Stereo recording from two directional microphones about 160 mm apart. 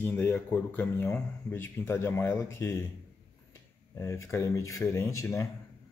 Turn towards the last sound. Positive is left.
turn(degrees=20)  # may be behind; listen again after turning